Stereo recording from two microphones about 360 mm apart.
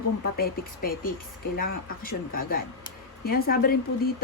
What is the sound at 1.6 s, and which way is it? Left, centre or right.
Speech, left.